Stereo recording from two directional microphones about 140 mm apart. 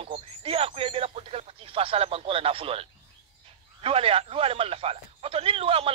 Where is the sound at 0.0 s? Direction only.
45° right (ahead or behind).